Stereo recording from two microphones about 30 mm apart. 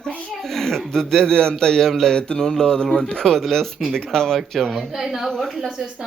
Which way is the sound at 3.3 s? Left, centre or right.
Centre.